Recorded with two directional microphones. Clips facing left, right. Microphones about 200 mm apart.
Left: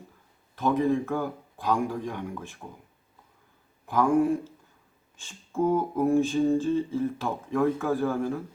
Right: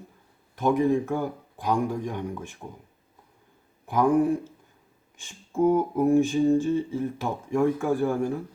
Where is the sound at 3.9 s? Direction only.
15° right (ahead or behind).